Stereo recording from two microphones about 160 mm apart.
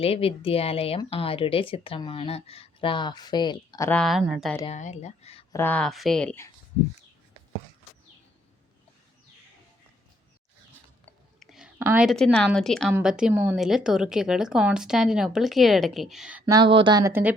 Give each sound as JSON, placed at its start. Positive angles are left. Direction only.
{"t": 0.0, "sound": "speech", "side_deg": 35}
{"t": 3.8, "sound": "speech", "side_deg": 10}
{"t": 4.1, "sound": "speech", "side_deg": 0}
{"t": 4.6, "sound": "speech", "side_deg": 45}
{"t": 5.5, "sound": "speech", "side_deg": 15}
{"t": 11.3, "sound": "whispering", "side_deg": -5}
{"t": 11.8, "sound": "a woman's voice", "side_deg": -15}
{"t": 12.0, "sound": "a woman's voice", "side_deg": 5}
{"t": 16.5, "sound": "speech", "side_deg": -30}
{"t": 17.1, "sound": "a woman's voice", "side_deg": -10}